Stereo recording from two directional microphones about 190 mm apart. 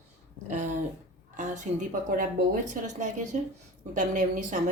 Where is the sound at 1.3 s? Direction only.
40° right (ahead or behind).